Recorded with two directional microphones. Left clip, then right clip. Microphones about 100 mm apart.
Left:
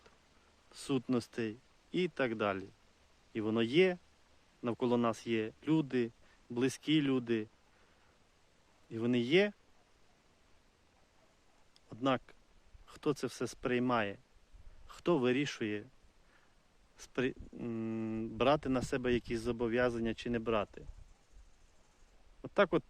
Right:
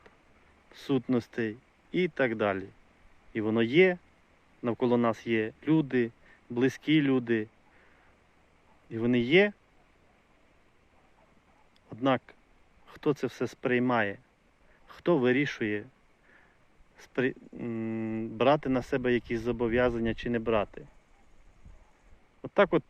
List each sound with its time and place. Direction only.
0.7 s speech: 15° left (ahead or behind)
8.9 s speech: 10° left (ahead or behind)
11.9 s speech: 10° left (ahead or behind)
17.0 s speech: 20° left (ahead or behind)
22.4 s speech: 15° left (ahead or behind)